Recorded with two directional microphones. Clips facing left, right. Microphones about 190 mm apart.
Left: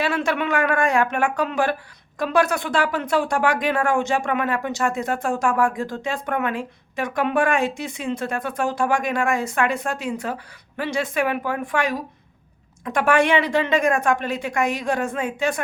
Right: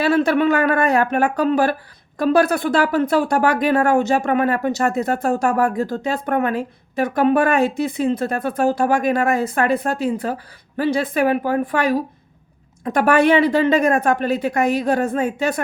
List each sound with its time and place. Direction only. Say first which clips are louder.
0.3 s speech: right 5 dB; 35° right (ahead or behind)